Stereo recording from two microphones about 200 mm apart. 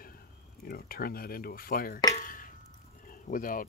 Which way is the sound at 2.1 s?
45° left (ahead or behind).